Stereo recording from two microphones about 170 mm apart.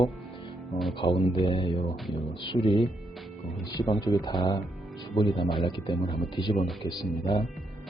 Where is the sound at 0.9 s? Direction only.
30° left (ahead or behind).